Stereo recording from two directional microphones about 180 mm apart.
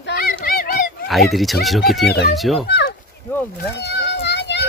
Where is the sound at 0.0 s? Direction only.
55° left (ahead or behind).